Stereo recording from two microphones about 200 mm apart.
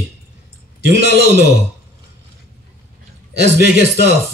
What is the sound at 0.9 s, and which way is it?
Speech, 60° right (ahead or behind).